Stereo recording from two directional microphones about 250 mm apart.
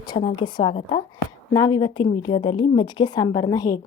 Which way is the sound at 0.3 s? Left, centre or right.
Centre.